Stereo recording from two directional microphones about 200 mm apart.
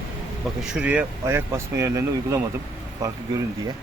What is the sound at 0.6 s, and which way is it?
Speech, 5° right (ahead or behind).